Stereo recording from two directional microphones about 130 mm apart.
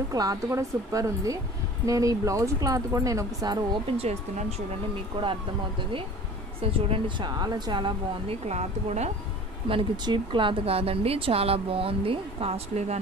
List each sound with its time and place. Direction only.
0.1 s speech: 30° right (ahead or behind)
4.0 s speech: 55° right (ahead or behind)
6.6 s speech: 50° right (ahead or behind)
7.2 s speech: 30° right (ahead or behind)
8.5 s a woman's voice: 60° right (ahead or behind)
9.7 s speech: 40° right (ahead or behind); by 13.0 s 55° right (ahead or behind)